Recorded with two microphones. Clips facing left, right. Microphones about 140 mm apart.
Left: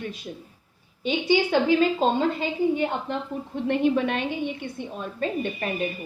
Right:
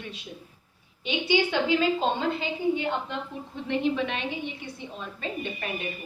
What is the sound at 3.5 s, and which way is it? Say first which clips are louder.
A woman's voice: left 4 dB; 50° left (ahead or behind).